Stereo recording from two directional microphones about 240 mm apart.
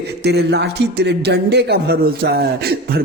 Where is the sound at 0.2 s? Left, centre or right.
Right.